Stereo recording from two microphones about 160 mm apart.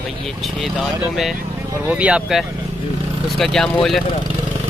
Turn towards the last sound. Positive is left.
turn(degrees=0)  # may be behind; listen again after turning